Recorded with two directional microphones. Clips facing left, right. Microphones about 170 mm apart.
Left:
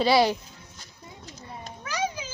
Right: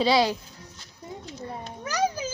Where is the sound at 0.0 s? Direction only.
5° left (ahead or behind).